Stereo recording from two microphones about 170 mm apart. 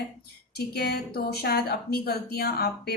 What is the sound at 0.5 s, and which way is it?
A woman's voice, 70° left (ahead or behind).